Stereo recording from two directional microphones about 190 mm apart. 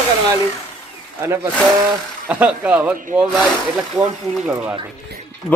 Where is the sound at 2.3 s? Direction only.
5° right (ahead or behind).